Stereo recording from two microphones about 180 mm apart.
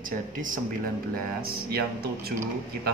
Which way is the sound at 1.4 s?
60° right (ahead or behind).